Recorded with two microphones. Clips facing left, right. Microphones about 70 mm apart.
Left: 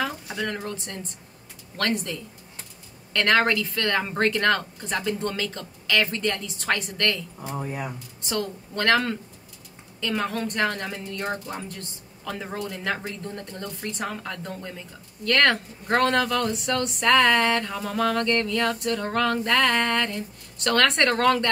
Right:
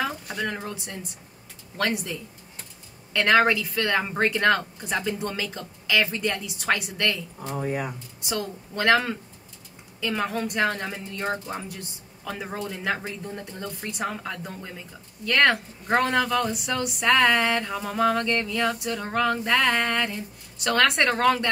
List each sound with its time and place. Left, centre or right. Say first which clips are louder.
0.5 s speech: left 1 dB; centre
7.6 s speech: right 6 dB; right
8.3 s speech: left 1 dB; centre
11.7 s a woman's voice: even; centre